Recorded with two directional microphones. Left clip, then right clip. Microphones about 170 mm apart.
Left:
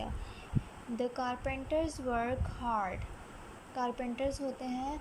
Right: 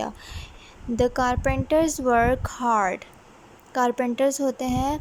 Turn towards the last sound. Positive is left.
turn(degrees=-45)  # may be behind; listen again after turning